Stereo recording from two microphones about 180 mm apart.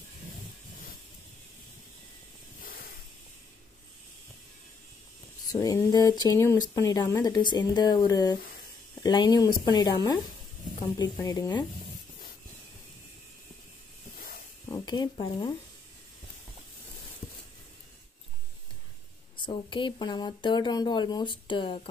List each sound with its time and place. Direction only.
2.6 s hiss: 55° left (ahead or behind)
5.4 s speech: 20° left (ahead or behind)
14.1 s hiss: 55° left (ahead or behind)
14.7 s speech: 25° left (ahead or behind)
19.3 s speech: 25° left (ahead or behind)